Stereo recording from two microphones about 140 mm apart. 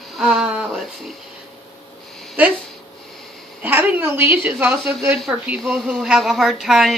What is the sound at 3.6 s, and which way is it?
A woman's voice, 15° right (ahead or behind).